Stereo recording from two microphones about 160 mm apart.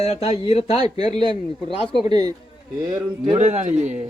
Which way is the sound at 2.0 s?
25° right (ahead or behind).